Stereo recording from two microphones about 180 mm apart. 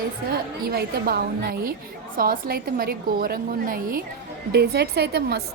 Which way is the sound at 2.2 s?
55° right (ahead or behind).